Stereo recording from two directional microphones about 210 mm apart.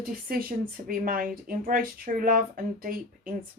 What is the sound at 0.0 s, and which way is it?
A woman's voice, 45° right (ahead or behind).